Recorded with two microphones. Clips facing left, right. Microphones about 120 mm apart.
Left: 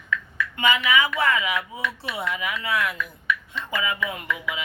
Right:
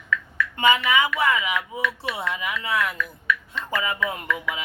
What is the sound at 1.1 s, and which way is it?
Speech, 15° right (ahead or behind).